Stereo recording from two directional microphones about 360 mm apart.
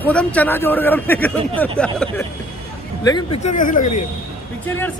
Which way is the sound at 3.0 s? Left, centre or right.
Centre.